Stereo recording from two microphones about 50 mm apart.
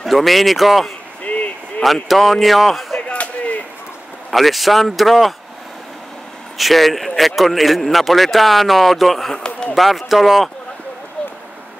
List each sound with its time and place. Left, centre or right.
0.0 s speech: centre
1.2 s a sound: left
2.0 s speech: centre
3.0 s a sound: left
4.3 s speech: centre
6.6 s speech: centre
9.3 s run: centre
9.8 s speech: centre